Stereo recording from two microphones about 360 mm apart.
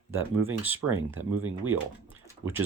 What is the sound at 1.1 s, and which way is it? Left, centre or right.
Speech, right.